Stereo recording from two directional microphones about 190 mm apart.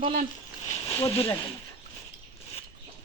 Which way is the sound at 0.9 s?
10° left (ahead or behind).